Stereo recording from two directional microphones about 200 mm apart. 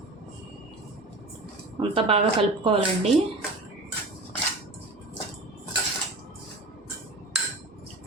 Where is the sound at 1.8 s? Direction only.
25° right (ahead or behind).